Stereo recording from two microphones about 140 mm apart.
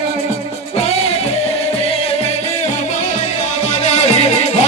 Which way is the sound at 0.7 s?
50° left (ahead or behind).